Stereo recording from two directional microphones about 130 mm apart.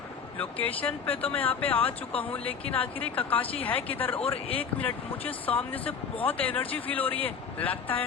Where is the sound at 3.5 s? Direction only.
45° left (ahead or behind).